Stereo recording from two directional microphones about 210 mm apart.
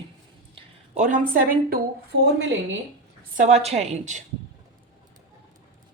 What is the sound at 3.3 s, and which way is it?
Speech, 30° right (ahead or behind).